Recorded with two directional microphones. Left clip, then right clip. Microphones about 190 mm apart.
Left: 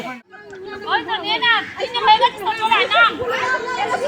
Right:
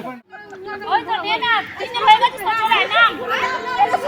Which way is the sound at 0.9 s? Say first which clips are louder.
Right 1 dB; 15° right (ahead or behind).